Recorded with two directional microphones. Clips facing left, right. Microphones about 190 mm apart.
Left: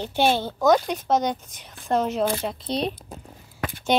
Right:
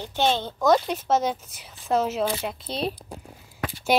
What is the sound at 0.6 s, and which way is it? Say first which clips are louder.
A woman's voice: left 1 dB; centre (ahead or behind).